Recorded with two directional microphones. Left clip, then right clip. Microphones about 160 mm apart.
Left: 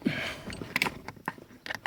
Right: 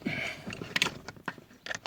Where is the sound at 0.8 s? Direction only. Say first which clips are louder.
Even; 25° left (ahead or behind).